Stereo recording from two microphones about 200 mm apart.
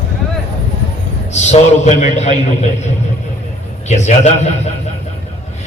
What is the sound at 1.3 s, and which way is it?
A man's voice, 35° left (ahead or behind).